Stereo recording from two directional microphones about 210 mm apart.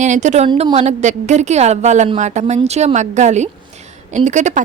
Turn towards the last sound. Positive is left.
turn(degrees=-35)  # may be behind; listen again after turning